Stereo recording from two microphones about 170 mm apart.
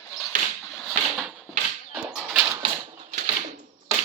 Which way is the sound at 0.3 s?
50° right (ahead or behind).